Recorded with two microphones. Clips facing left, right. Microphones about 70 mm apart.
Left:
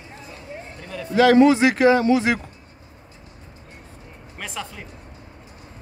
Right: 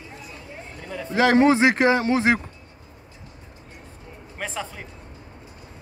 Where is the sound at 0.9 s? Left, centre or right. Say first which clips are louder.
Left 3 dB; right.